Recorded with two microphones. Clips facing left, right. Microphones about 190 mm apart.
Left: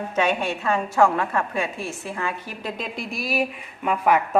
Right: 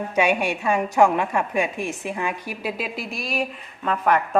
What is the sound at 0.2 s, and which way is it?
A woman's voice, 10° right (ahead or behind).